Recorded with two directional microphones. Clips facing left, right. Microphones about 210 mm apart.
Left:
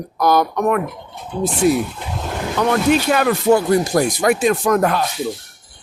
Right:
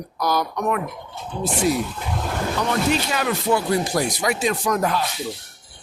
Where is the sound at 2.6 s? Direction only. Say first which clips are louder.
Left 7 dB; 60° left (ahead or behind).